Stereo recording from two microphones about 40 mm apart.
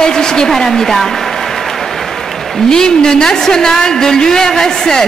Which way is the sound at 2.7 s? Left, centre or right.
Centre.